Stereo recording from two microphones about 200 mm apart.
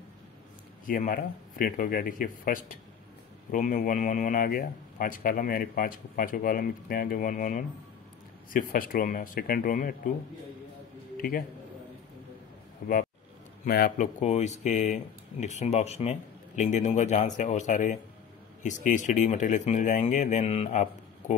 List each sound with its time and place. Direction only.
0.8 s a man's voice: 45° left (ahead or behind)
11.1 s a man's voice: 45° left (ahead or behind)
12.8 s a man's voice: 45° left (ahead or behind)